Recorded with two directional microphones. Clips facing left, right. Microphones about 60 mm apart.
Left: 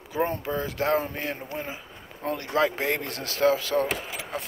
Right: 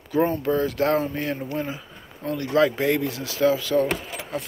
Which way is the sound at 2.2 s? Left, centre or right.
Left.